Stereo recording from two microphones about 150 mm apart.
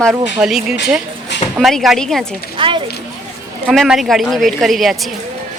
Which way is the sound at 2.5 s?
35° right (ahead or behind).